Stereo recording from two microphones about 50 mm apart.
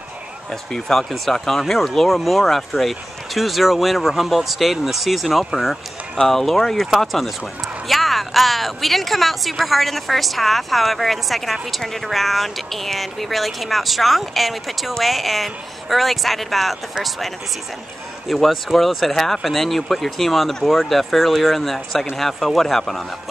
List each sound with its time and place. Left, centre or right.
0.5 s speech: centre
18.3 s speech: centre